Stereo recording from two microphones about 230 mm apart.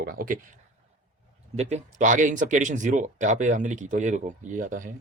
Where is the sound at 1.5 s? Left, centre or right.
Right.